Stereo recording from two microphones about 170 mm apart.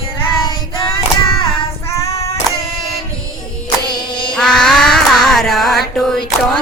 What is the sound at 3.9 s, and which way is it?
Music, 25° left (ahead or behind).